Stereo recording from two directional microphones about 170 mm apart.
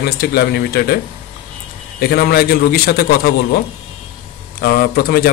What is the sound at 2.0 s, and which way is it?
A man's voice, 65° left (ahead or behind).